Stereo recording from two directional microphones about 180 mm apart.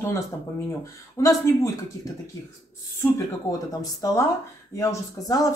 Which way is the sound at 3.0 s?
20° left (ahead or behind).